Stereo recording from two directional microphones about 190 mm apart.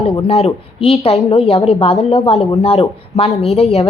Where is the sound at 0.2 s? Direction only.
35° left (ahead or behind).